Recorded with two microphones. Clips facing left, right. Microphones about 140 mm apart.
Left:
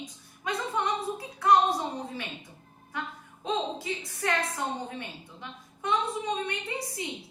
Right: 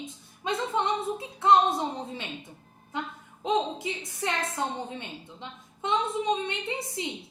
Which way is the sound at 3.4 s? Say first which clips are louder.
Right 3 dB; 20° right (ahead or behind).